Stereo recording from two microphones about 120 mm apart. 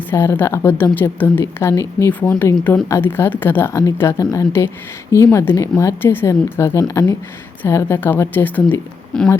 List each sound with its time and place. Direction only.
0.1 s a woman's voice: 20° left (ahead or behind)